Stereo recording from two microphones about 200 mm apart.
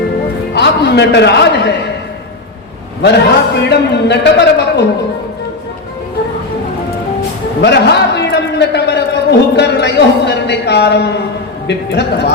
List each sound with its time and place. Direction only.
0.5 s a man's voice: 60° left (ahead or behind)
3.0 s a man's voice: 55° left (ahead or behind)
7.6 s a sound: 60° left (ahead or behind)
9.6 s a man's voice: 60° left (ahead or behind)